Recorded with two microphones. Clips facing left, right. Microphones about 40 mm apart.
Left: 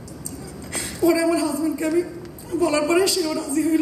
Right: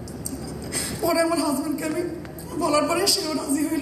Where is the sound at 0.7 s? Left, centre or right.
Left.